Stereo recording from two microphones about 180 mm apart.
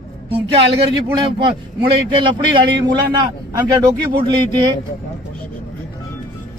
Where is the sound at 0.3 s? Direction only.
30° right (ahead or behind).